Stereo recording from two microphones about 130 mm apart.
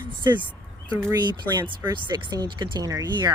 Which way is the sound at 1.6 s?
35° right (ahead or behind).